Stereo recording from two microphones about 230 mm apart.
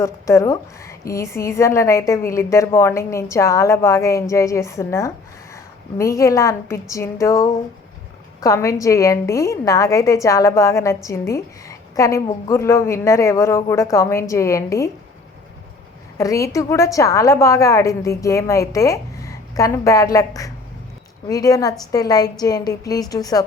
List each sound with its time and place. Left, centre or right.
0.0 s a woman's voice: centre
16.1 s a woman's voice: centre